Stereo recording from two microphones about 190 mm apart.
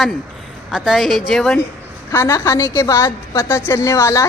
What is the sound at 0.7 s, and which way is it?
Speech, centre (ahead or behind).